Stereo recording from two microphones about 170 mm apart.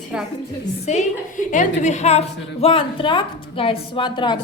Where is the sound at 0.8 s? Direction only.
45° left (ahead or behind).